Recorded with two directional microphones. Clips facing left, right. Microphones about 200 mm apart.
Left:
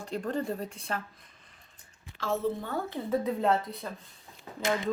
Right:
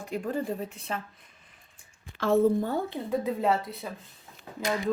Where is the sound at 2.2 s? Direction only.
60° right (ahead or behind).